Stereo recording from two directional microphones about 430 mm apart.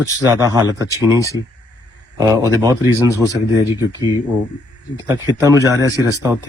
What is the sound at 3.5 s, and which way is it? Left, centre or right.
Speech, centre.